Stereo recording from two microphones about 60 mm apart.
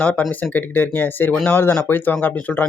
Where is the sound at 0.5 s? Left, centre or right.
Left.